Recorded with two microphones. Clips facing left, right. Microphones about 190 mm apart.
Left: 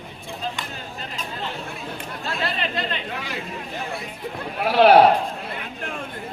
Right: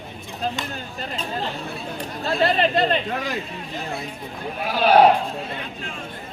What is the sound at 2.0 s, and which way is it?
Chatter, 35° right (ahead or behind).